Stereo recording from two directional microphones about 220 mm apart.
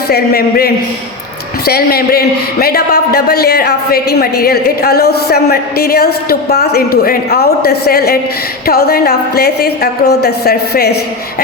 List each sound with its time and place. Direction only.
0.1 s a man's voice: 45° left (ahead or behind)